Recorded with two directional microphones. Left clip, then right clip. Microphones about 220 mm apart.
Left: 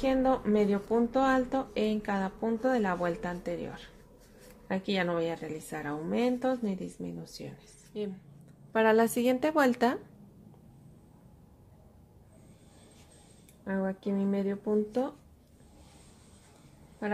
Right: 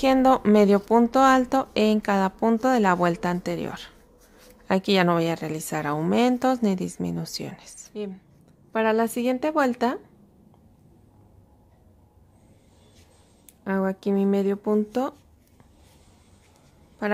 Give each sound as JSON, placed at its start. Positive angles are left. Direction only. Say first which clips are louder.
{"t": 0.0, "sound": "speech", "louder": "right 9 dB", "side_deg": -35}
{"t": 7.9, "sound": "a woman's voice", "louder": "right 3 dB", "side_deg": -15}
{"t": 13.7, "sound": "speech", "louder": "right 8 dB", "side_deg": -30}
{"t": 17.0, "sound": "a sound", "louder": "right 8 dB", "side_deg": -30}